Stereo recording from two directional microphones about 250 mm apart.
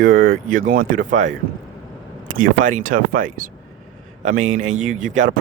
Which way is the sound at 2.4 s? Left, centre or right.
Right.